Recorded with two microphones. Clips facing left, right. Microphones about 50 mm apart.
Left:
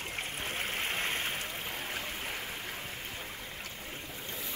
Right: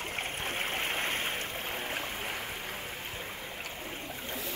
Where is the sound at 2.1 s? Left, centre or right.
Centre.